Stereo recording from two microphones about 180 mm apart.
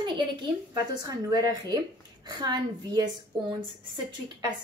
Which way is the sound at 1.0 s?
20° right (ahead or behind).